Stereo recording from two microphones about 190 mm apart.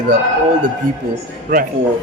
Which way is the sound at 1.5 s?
45° right (ahead or behind).